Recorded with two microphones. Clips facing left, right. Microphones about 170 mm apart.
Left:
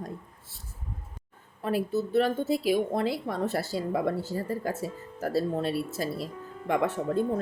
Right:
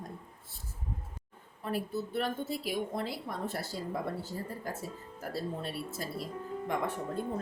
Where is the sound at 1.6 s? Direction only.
85° left.